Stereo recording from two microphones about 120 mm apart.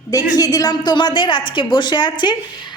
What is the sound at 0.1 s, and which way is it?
A woman's voice, 30° left (ahead or behind).